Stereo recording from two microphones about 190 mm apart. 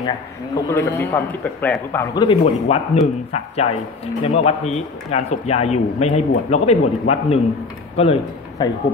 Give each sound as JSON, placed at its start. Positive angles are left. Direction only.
{"t": 0.7, "sound": "a man's voice", "side_deg": 15}
{"t": 2.1, "sound": "a man's voice", "side_deg": 30}